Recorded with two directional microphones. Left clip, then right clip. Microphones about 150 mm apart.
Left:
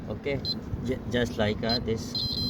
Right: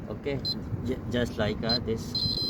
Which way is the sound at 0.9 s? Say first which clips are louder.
Left 2 dB; 5° left (ahead or behind).